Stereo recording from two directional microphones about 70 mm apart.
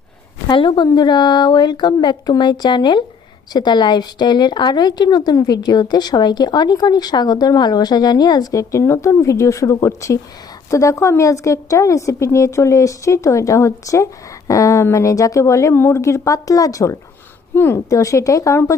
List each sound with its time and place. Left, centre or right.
0.9 s a woman's voice: left
17.5 s a woman's voice: left
17.8 s a woman's voice: left